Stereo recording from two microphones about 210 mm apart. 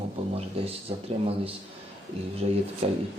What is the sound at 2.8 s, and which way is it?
Speech, 30° right (ahead or behind).